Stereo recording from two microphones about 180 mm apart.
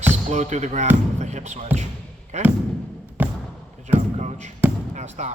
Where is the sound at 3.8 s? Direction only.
40° right (ahead or behind).